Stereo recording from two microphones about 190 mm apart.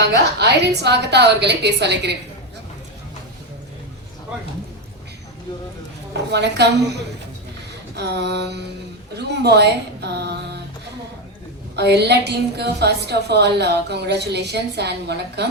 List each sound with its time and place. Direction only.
0.0 s a woman's voice: 60° right (ahead or behind)
6.3 s a woman's voice: 60° right (ahead or behind)
7.9 s a woman's voice: 60° right (ahead or behind)
11.8 s a woman's voice: 60° right (ahead or behind)